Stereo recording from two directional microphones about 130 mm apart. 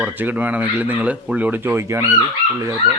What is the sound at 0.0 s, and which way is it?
Speech, 15° right (ahead or behind).